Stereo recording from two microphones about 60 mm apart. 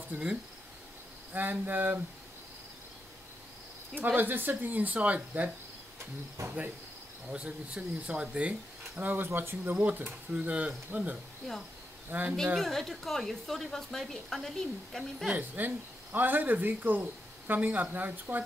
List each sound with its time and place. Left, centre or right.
0.1 s speech: centre
1.3 s speech: right
4.0 s speech: right
6.4 s cricket: right
7.3 s speech: centre
9.1 s speech: right
9.8 s speech: right
12.5 s a woman's voice: centre
15.3 s speech: right